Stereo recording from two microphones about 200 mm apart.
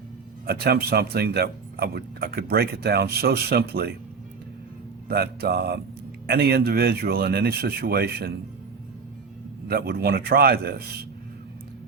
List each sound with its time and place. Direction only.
0.4 s speech: 50° right (ahead or behind)
5.0 s speech: 50° right (ahead or behind)
9.6 s speech: 50° right (ahead or behind)